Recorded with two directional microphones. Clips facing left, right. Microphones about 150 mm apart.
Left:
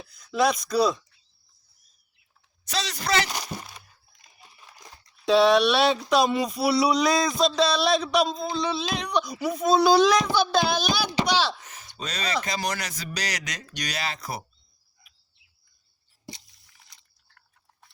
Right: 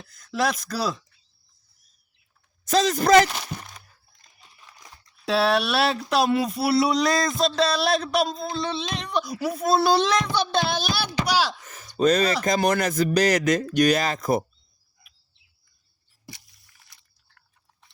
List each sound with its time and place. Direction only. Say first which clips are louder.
0.1 s speech: left 2 dB; centre (ahead or behind)
2.6 s speech: right 10 dB; 45° right (ahead or behind)
3.4 s a sound: even; 10° left (ahead or behind)
5.2 s speech: left 4 dB; 5° right (ahead or behind)
11.9 s speech: right 10 dB; 50° right (ahead or behind)